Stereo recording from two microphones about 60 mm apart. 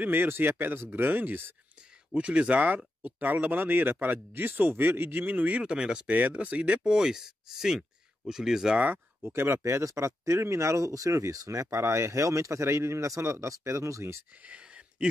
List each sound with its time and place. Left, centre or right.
0.0 s speech: right
2.1 s speech: centre
5.6 s speech: centre
6.1 s speech: right; by 8.7 s centre
8.9 s speech: right
14.4 s a sound: centre